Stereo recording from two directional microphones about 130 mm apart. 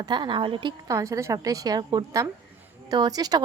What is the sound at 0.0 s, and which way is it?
Speech, 35° right (ahead or behind).